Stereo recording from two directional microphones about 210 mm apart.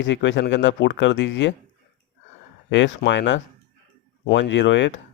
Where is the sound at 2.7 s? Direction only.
60° left (ahead or behind).